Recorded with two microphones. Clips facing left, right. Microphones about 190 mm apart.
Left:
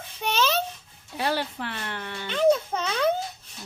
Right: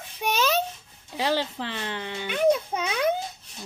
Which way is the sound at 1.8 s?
15° right (ahead or behind).